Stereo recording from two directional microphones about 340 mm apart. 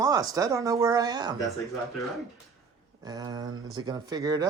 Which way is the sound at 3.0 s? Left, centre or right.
Centre.